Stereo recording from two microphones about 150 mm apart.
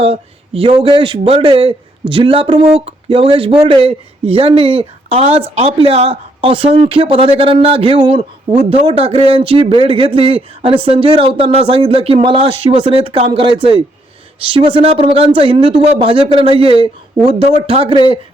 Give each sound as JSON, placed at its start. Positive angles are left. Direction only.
{"t": 0.0, "sound": "speech", "side_deg": -40}